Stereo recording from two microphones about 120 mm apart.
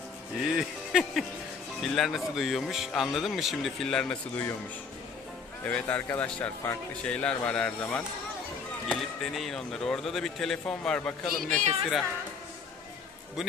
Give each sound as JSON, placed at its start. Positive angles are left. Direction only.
{"t": 0.4, "sound": "speech", "side_deg": -5}
{"t": 5.6, "sound": "speech", "side_deg": 15}
{"t": 11.5, "sound": "speech", "side_deg": -80}